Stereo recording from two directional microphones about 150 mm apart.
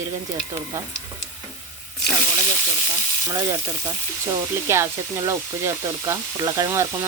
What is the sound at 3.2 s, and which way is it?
Sizzle, 20° right (ahead or behind).